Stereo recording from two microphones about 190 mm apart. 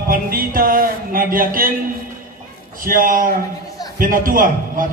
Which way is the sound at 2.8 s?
45° right (ahead or behind).